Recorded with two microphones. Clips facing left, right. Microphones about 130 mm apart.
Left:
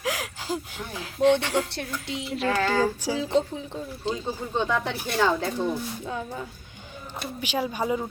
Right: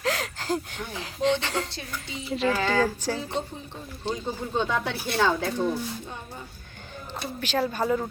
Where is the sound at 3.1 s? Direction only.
90° left.